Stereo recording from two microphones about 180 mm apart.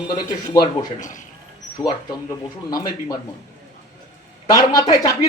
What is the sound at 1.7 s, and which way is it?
A man's voice, 20° left (ahead or behind).